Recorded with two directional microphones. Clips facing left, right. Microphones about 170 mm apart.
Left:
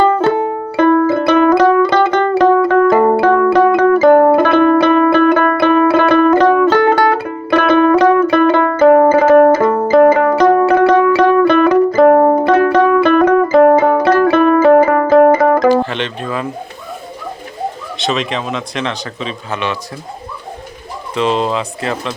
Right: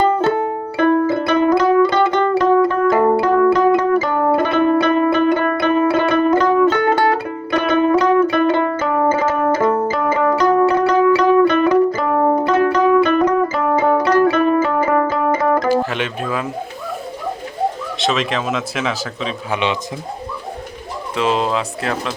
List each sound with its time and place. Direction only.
0.1 s music: 80° left
15.8 s speech: 5° right (ahead or behind)
17.9 s speech: centre (ahead or behind)
21.2 s speech: 5° right (ahead or behind)